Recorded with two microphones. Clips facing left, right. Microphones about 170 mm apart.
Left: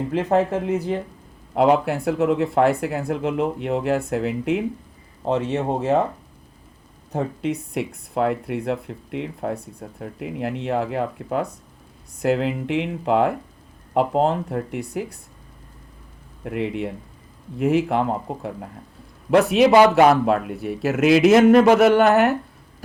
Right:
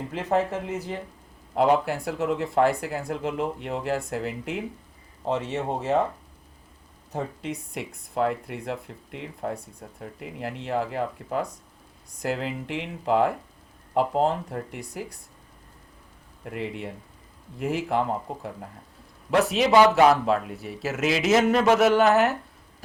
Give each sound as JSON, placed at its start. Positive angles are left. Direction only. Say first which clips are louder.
{"t": 0.1, "sound": "speech", "louder": "left 5 dB", "side_deg": 60}
{"t": 7.1, "sound": "speech", "louder": "left 7 dB", "side_deg": 60}
{"t": 16.4, "sound": "speech", "louder": "left 7 dB", "side_deg": 60}